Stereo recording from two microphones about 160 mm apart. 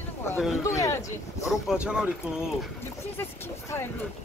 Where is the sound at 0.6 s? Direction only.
20° left (ahead or behind).